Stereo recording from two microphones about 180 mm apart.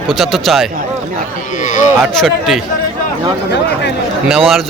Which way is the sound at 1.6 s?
45° left (ahead or behind).